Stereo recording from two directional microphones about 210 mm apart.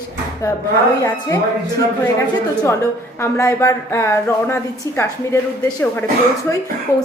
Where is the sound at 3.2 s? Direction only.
15° left (ahead or behind).